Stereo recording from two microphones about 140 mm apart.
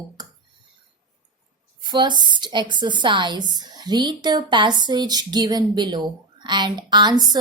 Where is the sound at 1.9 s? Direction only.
30° right (ahead or behind).